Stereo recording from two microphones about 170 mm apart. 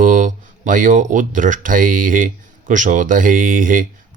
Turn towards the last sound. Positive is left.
turn(degrees=-50)  # may be behind; listen again after turning